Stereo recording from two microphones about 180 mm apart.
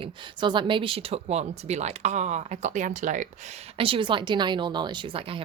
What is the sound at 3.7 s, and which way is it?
Speech, 30° right (ahead or behind).